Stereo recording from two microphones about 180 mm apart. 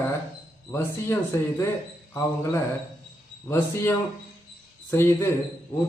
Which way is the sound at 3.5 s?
10° left (ahead or behind).